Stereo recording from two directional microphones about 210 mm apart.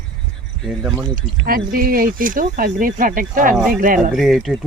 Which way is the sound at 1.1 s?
45° right (ahead or behind).